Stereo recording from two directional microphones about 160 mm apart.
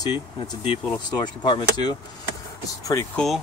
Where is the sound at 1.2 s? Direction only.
30° left (ahead or behind).